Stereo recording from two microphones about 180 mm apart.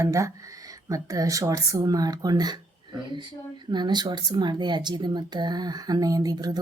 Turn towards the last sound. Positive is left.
turn(degrees=-20)  # may be behind; listen again after turning